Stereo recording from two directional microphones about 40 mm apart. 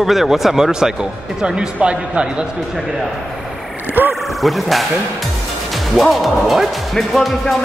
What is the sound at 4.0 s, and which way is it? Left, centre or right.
Speech, right.